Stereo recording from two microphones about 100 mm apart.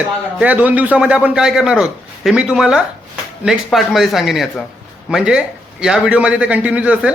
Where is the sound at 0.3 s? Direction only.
15° right (ahead or behind).